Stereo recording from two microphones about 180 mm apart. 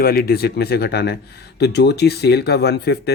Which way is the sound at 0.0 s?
55° left (ahead or behind).